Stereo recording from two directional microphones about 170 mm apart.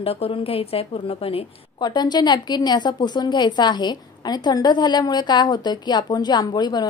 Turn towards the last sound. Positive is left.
turn(degrees=25)  # may be behind; listen again after turning